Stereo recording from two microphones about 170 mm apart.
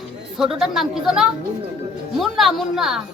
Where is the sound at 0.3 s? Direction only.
Centre (ahead or behind).